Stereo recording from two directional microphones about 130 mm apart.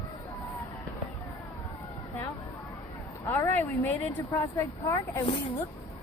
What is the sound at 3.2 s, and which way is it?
Speech, 20° left (ahead or behind).